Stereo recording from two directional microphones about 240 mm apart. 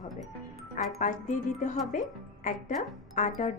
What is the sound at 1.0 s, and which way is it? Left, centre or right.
Speech, left.